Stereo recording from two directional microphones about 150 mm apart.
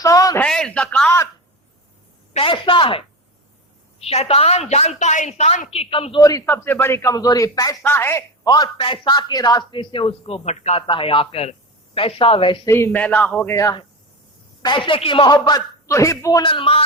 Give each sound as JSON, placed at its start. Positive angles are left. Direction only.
{"t": 0.0, "sound": "a sound", "side_deg": 25}
{"t": 0.3, "sound": "a man's voice", "side_deg": 5}
{"t": 2.3, "sound": "a man's voice", "side_deg": 35}
{"t": 4.0, "sound": "speech", "side_deg": 45}
{"t": 6.4, "sound": "a man's voice", "side_deg": 15}
{"t": 8.4, "sound": "a man's voice", "side_deg": 25}
{"t": 12.6, "sound": "a man's voice", "side_deg": 15}
{"t": 14.6, "sound": "a man's voice", "side_deg": 30}
{"t": 16.5, "sound": "a man's voice", "side_deg": 35}